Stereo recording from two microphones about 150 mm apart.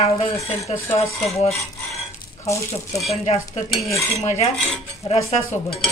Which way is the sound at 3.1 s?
45° left (ahead or behind).